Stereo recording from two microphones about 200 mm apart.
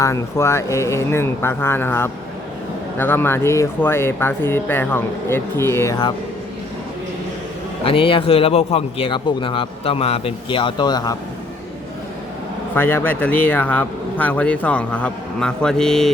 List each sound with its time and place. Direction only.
0.0 s speech: 15° left (ahead or behind)
7.9 s a man's voice: 25° left (ahead or behind)
12.7 s speech: 10° left (ahead or behind)